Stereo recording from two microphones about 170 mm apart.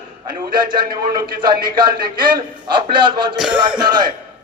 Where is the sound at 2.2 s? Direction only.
25° right (ahead or behind).